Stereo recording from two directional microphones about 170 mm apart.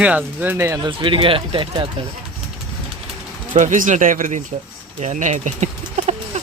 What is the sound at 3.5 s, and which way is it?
Speech, 50° right (ahead or behind).